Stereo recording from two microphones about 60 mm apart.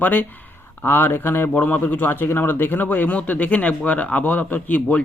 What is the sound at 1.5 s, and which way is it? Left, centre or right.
Speech, left.